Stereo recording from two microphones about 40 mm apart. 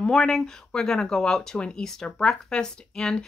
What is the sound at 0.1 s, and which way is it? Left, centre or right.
Speech, centre.